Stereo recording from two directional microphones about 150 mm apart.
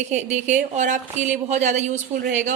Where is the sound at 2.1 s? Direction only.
75° right (ahead or behind).